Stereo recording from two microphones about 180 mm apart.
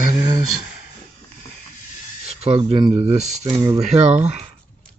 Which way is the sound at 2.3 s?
35° right (ahead or behind).